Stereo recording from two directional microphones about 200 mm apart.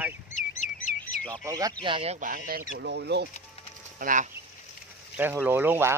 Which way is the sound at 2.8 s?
55° right (ahead or behind).